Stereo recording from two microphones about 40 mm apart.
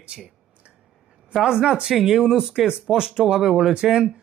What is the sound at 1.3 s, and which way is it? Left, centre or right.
Speech, centre.